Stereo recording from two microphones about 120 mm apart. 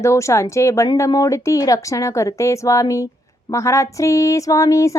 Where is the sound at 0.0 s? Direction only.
25° left (ahead or behind).